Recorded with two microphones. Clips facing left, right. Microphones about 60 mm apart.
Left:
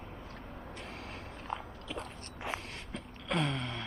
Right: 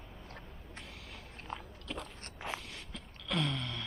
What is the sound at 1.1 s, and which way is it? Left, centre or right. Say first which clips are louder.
Vehicle: left 3 dB; left.